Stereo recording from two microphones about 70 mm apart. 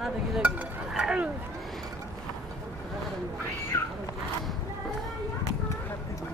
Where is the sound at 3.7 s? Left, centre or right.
Left.